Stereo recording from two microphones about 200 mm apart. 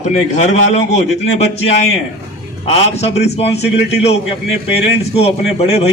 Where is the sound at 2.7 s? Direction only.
30° left (ahead or behind).